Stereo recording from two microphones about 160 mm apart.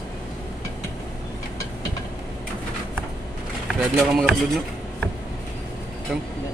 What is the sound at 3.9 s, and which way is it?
Speech, centre (ahead or behind).